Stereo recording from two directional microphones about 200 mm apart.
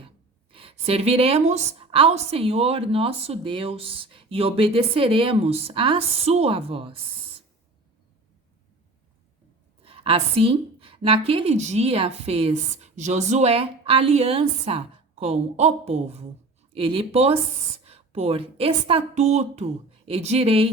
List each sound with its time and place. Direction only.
0.5 s a woman's voice: 30° right (ahead or behind)
9.8 s a woman's voice: 30° right (ahead or behind)